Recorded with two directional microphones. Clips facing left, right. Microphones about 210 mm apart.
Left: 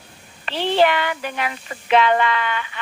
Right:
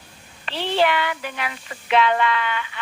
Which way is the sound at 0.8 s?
45° left (ahead or behind).